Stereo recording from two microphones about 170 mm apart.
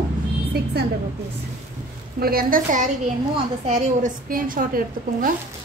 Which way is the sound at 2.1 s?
60° right (ahead or behind).